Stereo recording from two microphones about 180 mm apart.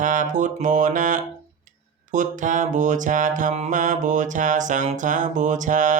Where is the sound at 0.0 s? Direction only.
45° right (ahead or behind).